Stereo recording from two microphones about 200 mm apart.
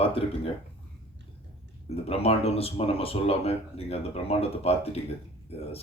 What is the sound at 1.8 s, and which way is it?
Speech, 30° left (ahead or behind).